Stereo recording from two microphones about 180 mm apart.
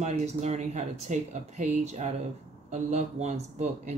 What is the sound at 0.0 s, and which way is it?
Speech, 40° right (ahead or behind).